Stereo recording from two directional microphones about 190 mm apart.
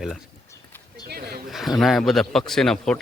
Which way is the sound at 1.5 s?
Centre (ahead or behind).